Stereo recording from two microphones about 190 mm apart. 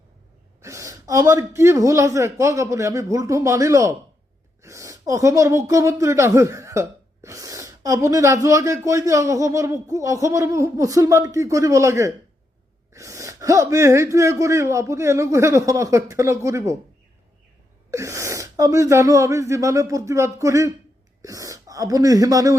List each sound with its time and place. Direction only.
0.6 s a woman's voice: 15° right (ahead or behind)
17.9 s speech: 15° right (ahead or behind)